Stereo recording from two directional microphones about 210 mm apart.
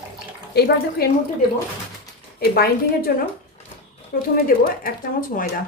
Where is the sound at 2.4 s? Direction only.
45° left (ahead or behind).